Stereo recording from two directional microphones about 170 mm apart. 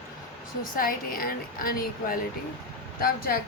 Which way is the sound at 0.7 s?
55° left (ahead or behind).